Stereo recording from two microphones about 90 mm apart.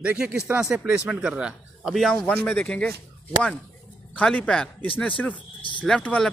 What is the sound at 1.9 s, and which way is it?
A man's voice, 5° left (ahead or behind).